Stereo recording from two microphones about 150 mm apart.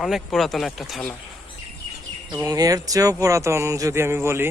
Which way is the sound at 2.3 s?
25° right (ahead or behind).